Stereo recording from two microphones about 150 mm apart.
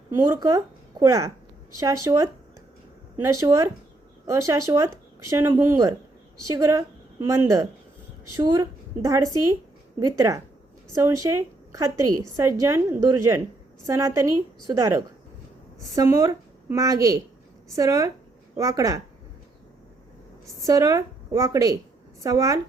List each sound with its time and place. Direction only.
0.1 s a woman's voice: 20° right (ahead or behind)
3.4 s a woman's voice: 20° right (ahead or behind)
20.6 s a woman's voice: 20° right (ahead or behind)